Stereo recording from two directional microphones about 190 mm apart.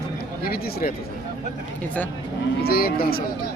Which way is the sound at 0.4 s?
55° left (ahead or behind).